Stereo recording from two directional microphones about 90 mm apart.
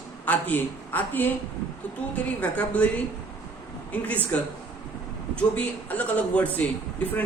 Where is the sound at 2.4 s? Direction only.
15° left (ahead or behind).